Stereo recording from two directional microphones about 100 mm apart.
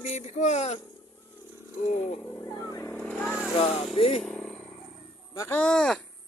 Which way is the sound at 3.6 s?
80° left.